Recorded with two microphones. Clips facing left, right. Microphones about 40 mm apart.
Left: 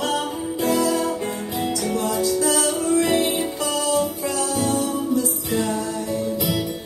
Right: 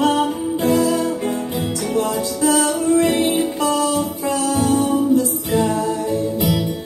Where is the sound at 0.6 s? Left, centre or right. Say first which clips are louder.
Right 3 dB; right.